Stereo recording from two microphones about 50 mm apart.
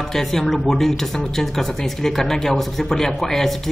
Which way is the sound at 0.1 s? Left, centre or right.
Centre.